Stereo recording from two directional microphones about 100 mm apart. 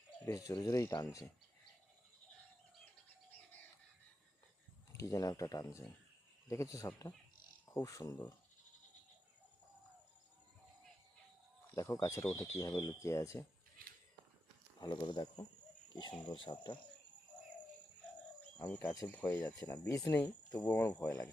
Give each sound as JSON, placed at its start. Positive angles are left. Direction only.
{"t": 0.3, "sound": "speech", "side_deg": 40}
{"t": 4.9, "sound": "speech", "side_deg": 35}
{"t": 11.7, "sound": "speech", "side_deg": 35}
{"t": 14.8, "sound": "speech", "side_deg": 45}
{"t": 18.6, "sound": "speech", "side_deg": 15}
{"t": 19.9, "sound": "speech", "side_deg": 30}
{"t": 20.1, "sound": "speech", "side_deg": 15}